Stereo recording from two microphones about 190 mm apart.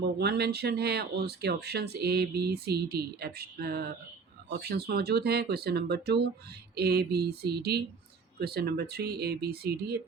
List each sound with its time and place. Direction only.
0.2 s speech: 60° right (ahead or behind)